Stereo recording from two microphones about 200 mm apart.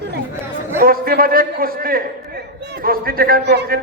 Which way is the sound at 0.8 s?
50° right (ahead or behind).